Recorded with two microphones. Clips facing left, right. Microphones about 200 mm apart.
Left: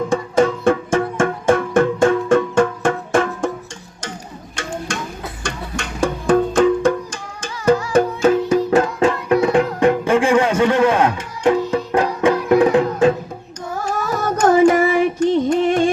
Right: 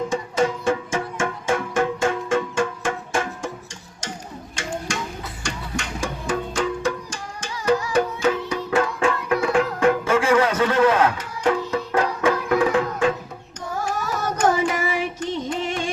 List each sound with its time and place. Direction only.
0.1 s music: 55° left (ahead or behind)
4.5 s music: 55° left (ahead or behind); by 8.9 s 40° left (ahead or behind)
9.0 s music: 25° left (ahead or behind)
14.3 s music: 50° left (ahead or behind)